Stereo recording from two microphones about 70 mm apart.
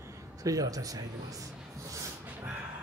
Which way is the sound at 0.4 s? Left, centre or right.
Right.